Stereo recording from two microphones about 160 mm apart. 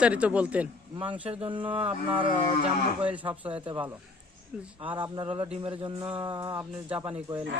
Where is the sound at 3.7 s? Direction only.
30° right (ahead or behind).